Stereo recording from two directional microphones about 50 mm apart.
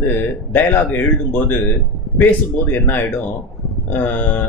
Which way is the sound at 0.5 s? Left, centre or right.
Left.